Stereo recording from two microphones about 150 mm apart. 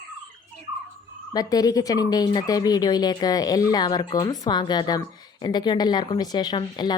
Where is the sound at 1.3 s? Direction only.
25° left (ahead or behind).